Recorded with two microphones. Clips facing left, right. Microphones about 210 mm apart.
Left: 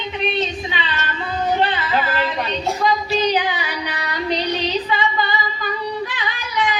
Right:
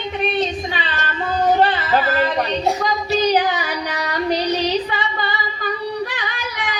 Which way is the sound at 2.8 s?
45° right (ahead or behind).